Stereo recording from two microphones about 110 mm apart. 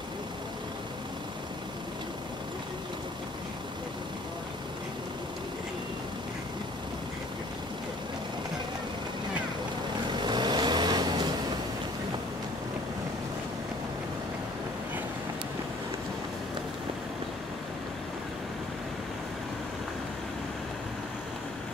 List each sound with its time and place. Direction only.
10.1 s vehicle: 45° right (ahead or behind)